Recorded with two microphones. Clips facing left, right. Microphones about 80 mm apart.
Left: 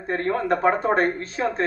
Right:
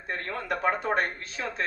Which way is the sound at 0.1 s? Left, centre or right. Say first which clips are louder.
Left 9 dB; left.